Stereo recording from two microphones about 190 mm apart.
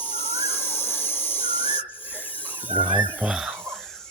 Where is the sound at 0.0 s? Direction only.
10° left (ahead or behind).